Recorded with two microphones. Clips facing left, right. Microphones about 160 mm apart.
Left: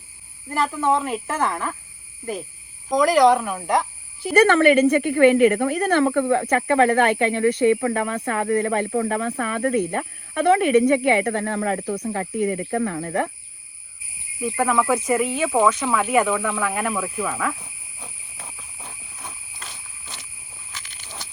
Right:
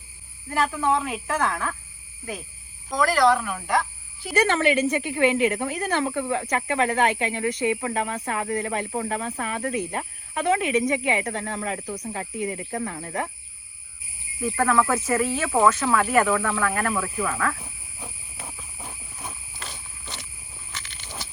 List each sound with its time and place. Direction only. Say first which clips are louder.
0.5 s speech: left 2 dB; centre (ahead or behind)
2.9 s speech: left 4 dB; 15° left (ahead or behind)
4.4 s speech: left 6 dB; 60° left (ahead or behind)
14.4 s speech: left 1 dB; 5° left (ahead or behind)
17.6 s a sound: right 2 dB; 10° right (ahead or behind)